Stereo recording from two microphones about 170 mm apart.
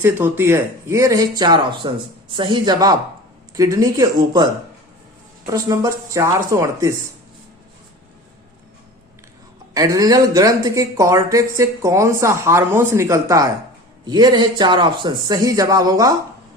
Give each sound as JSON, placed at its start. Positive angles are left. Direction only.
{"t": 0.0, "sound": "speech", "side_deg": -10}
{"t": 5.5, "sound": "speech", "side_deg": -20}
{"t": 9.7, "sound": "speech", "side_deg": -20}